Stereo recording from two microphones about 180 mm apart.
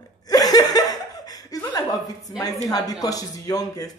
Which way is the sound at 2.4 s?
20° left (ahead or behind).